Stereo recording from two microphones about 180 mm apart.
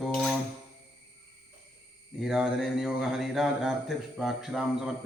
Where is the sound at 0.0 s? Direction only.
Centre (ahead or behind).